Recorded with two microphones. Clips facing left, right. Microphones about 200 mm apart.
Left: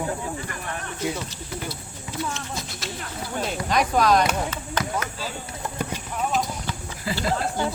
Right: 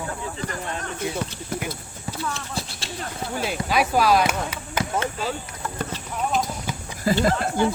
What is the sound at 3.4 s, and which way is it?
Speech, 5° right (ahead or behind).